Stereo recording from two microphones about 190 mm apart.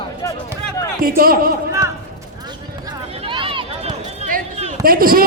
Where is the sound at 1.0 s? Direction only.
50° right (ahead or behind).